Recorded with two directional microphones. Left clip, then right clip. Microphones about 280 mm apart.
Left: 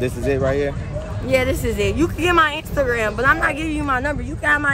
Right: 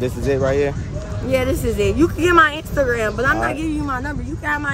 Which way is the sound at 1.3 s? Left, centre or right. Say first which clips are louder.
Even; centre.